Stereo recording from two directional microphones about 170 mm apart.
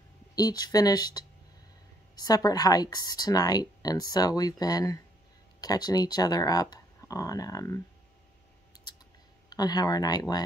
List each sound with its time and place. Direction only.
0.4 s speech: 20° left (ahead or behind)
8.7 s a sound: 25° left (ahead or behind)
9.5 s speech: 25° left (ahead or behind)